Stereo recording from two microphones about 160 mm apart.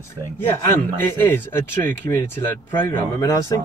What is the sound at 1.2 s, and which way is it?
Speech, 15° left (ahead or behind).